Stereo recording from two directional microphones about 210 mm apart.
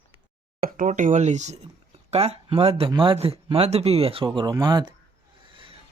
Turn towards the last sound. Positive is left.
turn(degrees=-25)  # may be behind; listen again after turning